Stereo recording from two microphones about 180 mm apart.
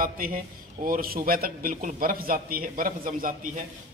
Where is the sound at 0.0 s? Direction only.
55° right (ahead or behind).